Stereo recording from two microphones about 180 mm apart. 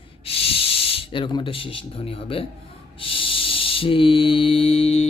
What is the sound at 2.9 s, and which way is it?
Mantra, 30° left (ahead or behind).